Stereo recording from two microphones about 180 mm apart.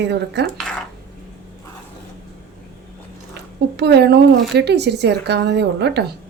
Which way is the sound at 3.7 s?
70° right (ahead or behind).